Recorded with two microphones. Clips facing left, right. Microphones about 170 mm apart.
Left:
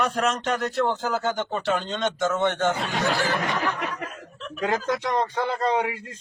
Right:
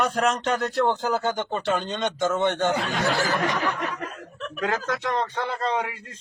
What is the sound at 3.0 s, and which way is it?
Speech, 40° right (ahead or behind).